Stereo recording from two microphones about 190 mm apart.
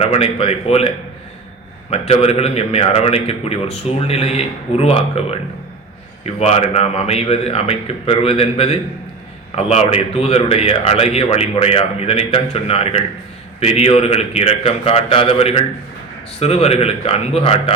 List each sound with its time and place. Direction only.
0.0 s a man's voice: 30° left (ahead or behind)